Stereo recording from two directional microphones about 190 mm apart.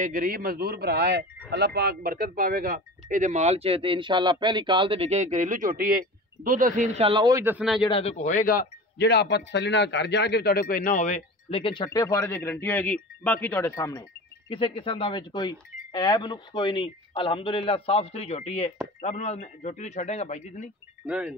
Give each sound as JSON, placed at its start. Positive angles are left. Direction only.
{"t": 0.0, "sound": "speech", "side_deg": -45}
{"t": 7.0, "sound": "a man's voice", "side_deg": -30}
{"t": 7.2, "sound": "a man's voice", "side_deg": -15}
{"t": 7.8, "sound": "speech", "side_deg": 30}
{"t": 21.0, "sound": "speech", "side_deg": -5}